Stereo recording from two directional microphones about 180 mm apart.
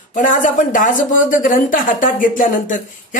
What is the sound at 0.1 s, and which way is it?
Speech, 45° left (ahead or behind).